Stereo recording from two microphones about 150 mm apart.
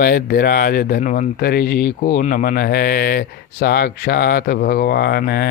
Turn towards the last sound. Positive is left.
turn(degrees=90)